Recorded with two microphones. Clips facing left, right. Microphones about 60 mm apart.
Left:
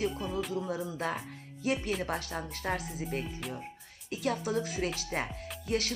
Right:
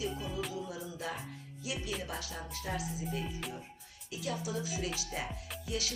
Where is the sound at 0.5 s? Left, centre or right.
Left.